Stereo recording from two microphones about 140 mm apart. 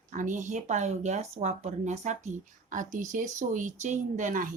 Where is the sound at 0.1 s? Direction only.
65° right (ahead or behind).